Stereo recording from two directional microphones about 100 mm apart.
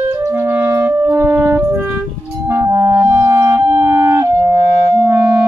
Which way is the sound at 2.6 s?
30° right (ahead or behind).